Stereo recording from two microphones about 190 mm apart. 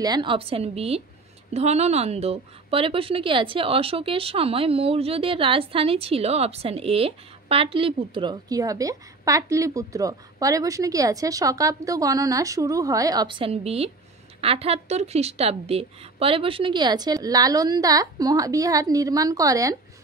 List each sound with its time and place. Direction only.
0.0 s a woman's voice: 25° right (ahead or behind)